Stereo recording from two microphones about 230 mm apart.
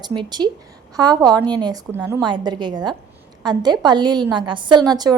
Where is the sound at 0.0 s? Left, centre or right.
Centre.